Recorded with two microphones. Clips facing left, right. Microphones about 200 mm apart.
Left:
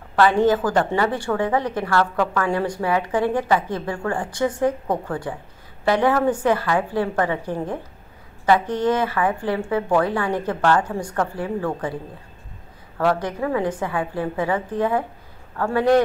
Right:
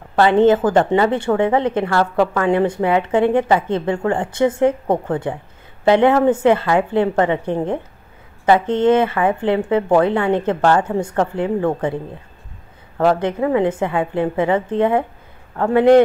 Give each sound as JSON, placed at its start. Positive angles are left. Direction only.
{"t": 0.1, "sound": "a woman's voice", "side_deg": -25}
{"t": 12.9, "sound": "a woman's voice", "side_deg": -25}